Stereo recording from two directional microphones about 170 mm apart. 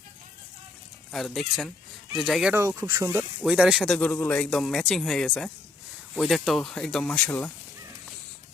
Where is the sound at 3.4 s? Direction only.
5° right (ahead or behind).